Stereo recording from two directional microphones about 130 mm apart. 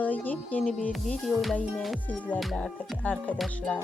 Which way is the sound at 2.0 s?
10° left (ahead or behind).